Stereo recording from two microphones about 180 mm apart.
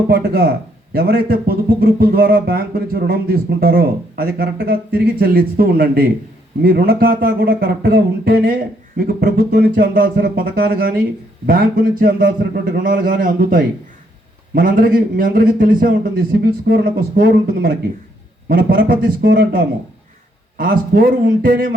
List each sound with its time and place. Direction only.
0.1 s a man's voice: 60° right (ahead or behind)